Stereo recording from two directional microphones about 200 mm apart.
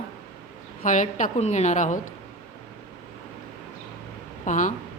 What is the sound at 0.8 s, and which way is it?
A woman's voice, 40° left (ahead or behind).